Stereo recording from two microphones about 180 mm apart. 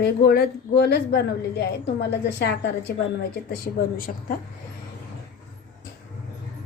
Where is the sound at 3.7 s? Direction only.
40° left (ahead or behind).